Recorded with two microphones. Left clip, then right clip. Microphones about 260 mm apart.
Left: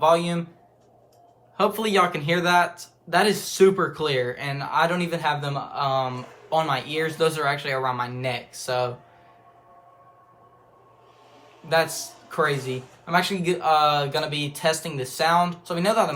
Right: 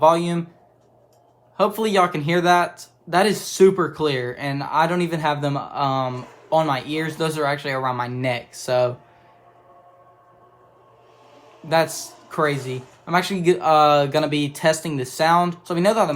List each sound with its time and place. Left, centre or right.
0.0 s speech: right
1.5 s speech: centre
11.6 s speech: right